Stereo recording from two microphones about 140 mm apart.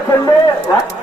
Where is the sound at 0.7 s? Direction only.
30° left (ahead or behind).